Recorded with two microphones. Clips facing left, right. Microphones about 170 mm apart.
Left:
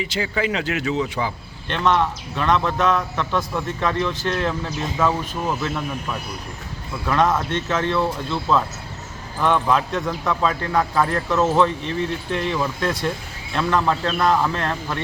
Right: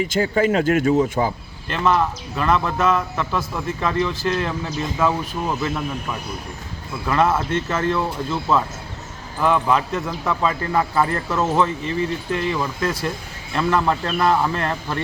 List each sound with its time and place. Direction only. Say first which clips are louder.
0.0 s speech: right 5 dB; 45° right (ahead or behind)
1.6 s a man's voice: even; 5° right (ahead or behind)